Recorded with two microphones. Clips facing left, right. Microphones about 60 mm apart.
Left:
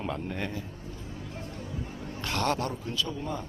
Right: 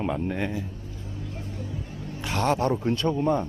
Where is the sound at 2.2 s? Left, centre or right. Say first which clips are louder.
Right 4 dB; centre.